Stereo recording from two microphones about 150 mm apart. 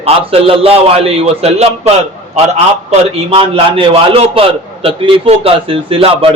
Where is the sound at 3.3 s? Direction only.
35° right (ahead or behind).